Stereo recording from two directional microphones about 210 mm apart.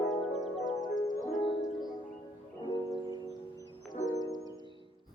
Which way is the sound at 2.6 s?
20° left (ahead or behind).